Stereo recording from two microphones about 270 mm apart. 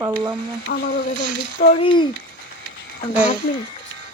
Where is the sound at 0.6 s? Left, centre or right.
Left.